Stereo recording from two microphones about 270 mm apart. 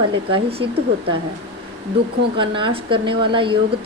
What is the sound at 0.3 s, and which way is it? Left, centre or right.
Speech, centre.